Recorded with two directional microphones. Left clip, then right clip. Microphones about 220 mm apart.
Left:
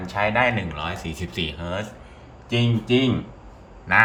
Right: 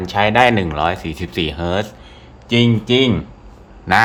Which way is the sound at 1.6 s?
25° right (ahead or behind).